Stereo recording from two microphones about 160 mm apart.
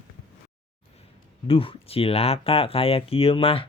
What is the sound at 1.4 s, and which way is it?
Speech, 35° left (ahead or behind).